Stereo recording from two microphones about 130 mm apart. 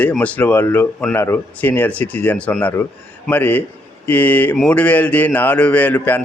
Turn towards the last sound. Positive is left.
turn(degrees=15)  # may be behind; listen again after turning